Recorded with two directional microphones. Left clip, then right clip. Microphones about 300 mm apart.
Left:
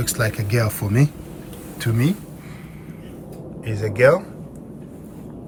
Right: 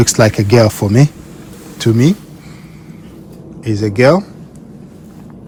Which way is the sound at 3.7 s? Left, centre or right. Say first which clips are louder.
Right 5 dB; centre.